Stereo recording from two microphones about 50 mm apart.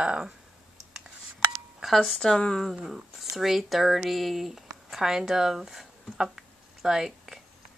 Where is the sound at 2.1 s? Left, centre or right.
Centre.